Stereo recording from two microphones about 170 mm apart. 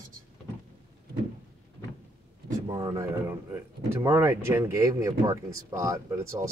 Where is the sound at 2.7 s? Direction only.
25° right (ahead or behind).